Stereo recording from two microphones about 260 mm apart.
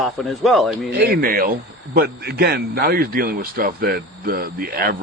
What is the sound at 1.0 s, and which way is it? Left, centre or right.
A man's voice, right.